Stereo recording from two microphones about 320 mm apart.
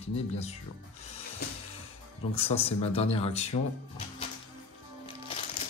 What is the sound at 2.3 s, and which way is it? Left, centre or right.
Speech, centre.